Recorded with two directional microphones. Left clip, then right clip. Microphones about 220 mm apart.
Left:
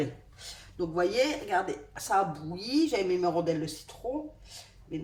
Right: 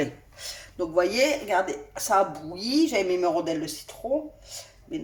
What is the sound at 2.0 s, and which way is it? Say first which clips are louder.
A woman's voice: right 5 dB; 25° right (ahead or behind).